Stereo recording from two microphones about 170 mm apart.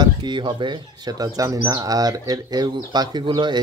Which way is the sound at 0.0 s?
25° right (ahead or behind).